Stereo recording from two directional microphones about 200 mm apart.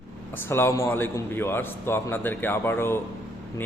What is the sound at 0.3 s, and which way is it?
A man's voice, 10° left (ahead or behind).